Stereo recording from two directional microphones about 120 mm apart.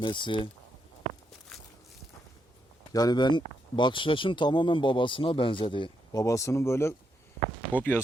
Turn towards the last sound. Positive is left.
turn(degrees=15)  # may be behind; listen again after turning